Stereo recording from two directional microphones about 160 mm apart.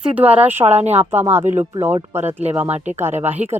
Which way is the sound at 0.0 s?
10° right (ahead or behind).